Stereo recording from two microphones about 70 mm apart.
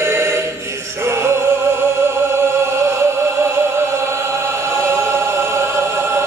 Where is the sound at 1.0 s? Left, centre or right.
Right.